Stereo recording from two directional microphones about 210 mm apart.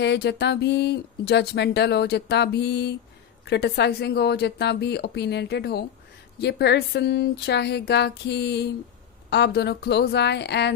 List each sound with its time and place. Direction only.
0.0 s speech: 55° left (ahead or behind)